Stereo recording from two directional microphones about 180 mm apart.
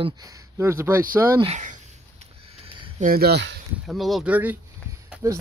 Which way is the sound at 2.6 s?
30° right (ahead or behind).